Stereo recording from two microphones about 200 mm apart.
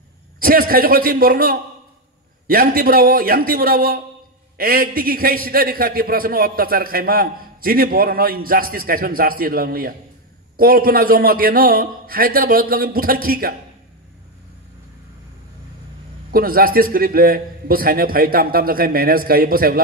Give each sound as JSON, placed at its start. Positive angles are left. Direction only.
{"t": 0.4, "sound": "a man's voice", "side_deg": -45}
{"t": 16.3, "sound": "a man's voice", "side_deg": -45}